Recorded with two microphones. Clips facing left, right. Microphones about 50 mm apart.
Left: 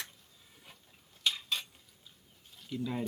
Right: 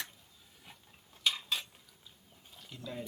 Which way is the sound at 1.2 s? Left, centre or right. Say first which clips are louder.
Even; centre.